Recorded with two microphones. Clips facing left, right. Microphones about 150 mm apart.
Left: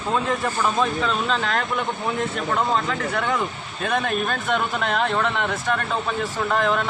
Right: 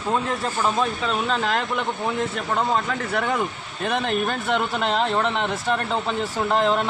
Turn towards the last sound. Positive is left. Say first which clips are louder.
# right 1 dB
turn(degrees=-25)  # may be behind; listen again after turning